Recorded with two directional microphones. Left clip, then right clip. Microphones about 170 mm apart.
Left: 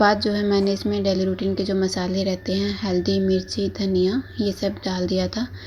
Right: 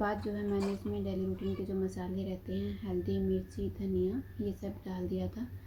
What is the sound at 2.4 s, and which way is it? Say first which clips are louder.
A woman's voice: left 15 dB; 35° left (ahead or behind).